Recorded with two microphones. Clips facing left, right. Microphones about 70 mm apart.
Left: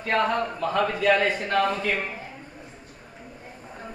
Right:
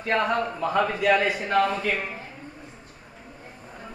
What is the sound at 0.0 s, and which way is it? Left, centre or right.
A man's voice, centre.